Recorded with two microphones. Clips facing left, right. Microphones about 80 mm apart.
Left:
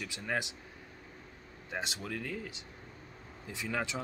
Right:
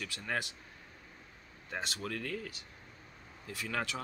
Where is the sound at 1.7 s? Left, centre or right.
Centre.